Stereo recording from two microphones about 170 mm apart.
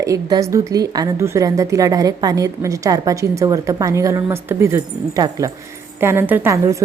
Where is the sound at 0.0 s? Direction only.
20° right (ahead or behind).